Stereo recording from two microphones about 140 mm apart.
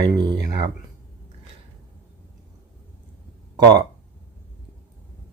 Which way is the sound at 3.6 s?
30° right (ahead or behind).